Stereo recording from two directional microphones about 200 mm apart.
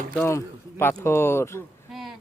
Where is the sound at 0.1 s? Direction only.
10° left (ahead or behind).